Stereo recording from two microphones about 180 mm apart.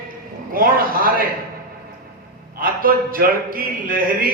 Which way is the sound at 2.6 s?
50° right (ahead or behind).